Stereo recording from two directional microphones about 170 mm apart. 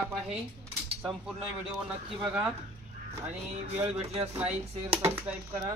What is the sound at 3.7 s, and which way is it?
Speech, 35° right (ahead or behind).